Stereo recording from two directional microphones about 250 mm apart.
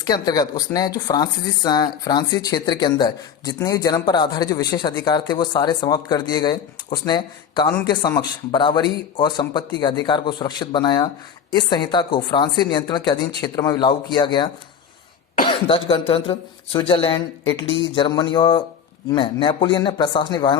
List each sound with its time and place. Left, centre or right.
0.0 s speech: centre